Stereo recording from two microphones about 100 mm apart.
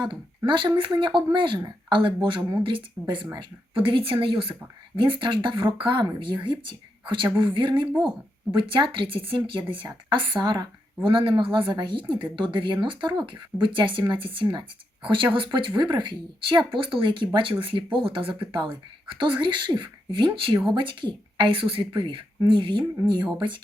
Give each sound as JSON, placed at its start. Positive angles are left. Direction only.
{"t": 0.0, "sound": "speech", "side_deg": -50}